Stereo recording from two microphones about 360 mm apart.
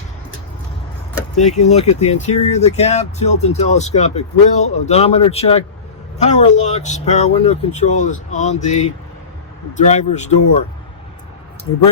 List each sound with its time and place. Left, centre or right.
1.4 s speech: centre
11.7 s speech: centre